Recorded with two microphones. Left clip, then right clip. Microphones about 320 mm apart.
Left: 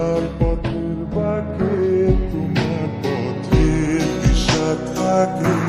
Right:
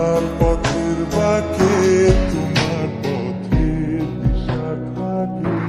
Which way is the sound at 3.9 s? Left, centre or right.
Left.